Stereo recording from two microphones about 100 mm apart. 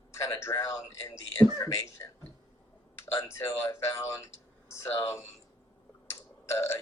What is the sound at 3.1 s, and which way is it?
Speech, 30° left (ahead or behind).